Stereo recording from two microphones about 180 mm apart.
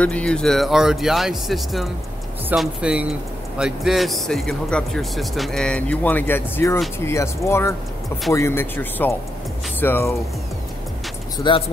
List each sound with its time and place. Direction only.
0.0 s speech: 5° left (ahead or behind)
11.3 s speech: 25° left (ahead or behind)